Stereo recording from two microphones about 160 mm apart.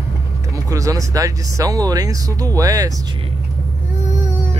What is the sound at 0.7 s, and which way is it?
Speech, 20° right (ahead or behind).